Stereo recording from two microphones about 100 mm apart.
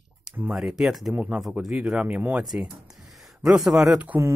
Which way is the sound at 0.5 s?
5° right (ahead or behind).